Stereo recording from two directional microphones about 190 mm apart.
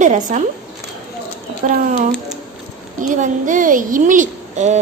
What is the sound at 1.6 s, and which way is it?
Speech, 45° right (ahead or behind).